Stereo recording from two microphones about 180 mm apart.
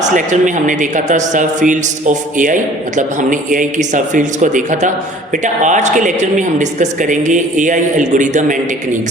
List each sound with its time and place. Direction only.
0.1 s a man's voice: 45° right (ahead or behind)